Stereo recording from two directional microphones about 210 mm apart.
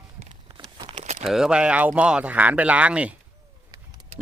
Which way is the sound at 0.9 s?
35° right (ahead or behind).